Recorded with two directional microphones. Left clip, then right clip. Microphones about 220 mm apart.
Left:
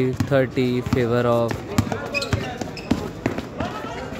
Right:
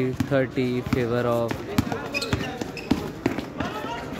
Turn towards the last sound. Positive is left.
turn(degrees=0)  # may be behind; listen again after turning